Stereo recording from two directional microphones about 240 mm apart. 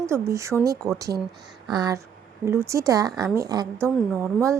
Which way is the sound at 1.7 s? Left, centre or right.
Centre.